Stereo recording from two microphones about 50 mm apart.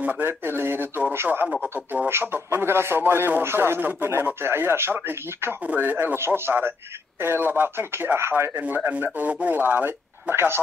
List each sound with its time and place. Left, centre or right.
0.0 s speech: right
0.3 s speech: right
3.4 s speech: right
5.8 s speech: right
6.1 s speech: right
8.5 s speech: right
10.3 s speech: right